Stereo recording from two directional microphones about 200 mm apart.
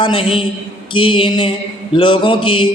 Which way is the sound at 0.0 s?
25° left (ahead or behind).